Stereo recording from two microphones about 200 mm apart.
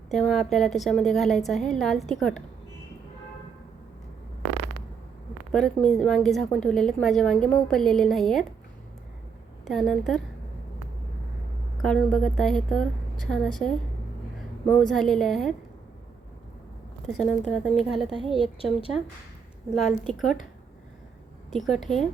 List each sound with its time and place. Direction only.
0.1 s a woman's voice: 5° left (ahead or behind)
5.5 s a woman's voice: 5° left (ahead or behind)
9.6 s a woman's voice: centre (ahead or behind)
11.8 s a woman's voice: 5° left (ahead or behind)
14.8 s a woman's voice: 5° left (ahead or behind)
17.1 s a woman's voice: centre (ahead or behind)
18.6 s a woman's voice: 30° left (ahead or behind)
19.7 s a woman's voice: centre (ahead or behind)
21.5 s a woman's voice: centre (ahead or behind)